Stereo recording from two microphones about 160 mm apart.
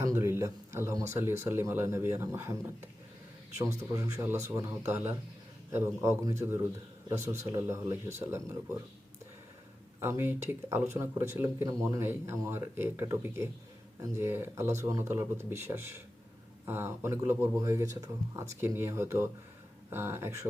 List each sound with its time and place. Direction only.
0.0 s speech: 20° right (ahead or behind)
10.0 s speech: 15° right (ahead or behind)